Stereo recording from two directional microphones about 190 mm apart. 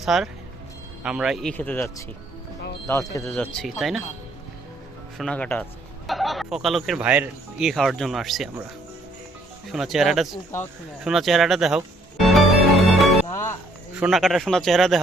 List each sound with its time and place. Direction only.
0.0 s speech: centre (ahead or behind)
5.1 s speech: 5° left (ahead or behind)
9.6 s speech: centre (ahead or behind)
10.3 s speech: 15° left (ahead or behind)
11.0 s speech: centre (ahead or behind)
12.2 s music: centre (ahead or behind)
13.2 s speech: 15° left (ahead or behind)
14.0 s speech: centre (ahead or behind)